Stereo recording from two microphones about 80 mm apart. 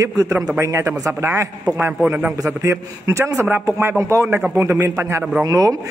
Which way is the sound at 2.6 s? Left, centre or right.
Right.